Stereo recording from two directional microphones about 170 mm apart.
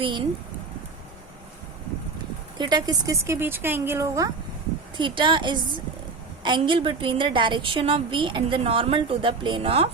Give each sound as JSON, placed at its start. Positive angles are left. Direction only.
{"t": 0.0, "sound": "a woman's voice", "side_deg": -30}
{"t": 2.6, "sound": "speech", "side_deg": -25}
{"t": 4.9, "sound": "a woman's voice", "side_deg": -30}